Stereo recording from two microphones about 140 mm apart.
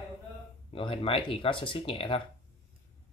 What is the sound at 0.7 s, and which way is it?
Speech, 40° left (ahead or behind).